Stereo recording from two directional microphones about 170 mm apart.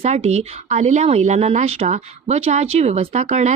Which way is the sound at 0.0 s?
40° right (ahead or behind).